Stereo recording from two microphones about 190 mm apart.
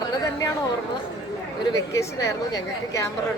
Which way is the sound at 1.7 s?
15° left (ahead or behind).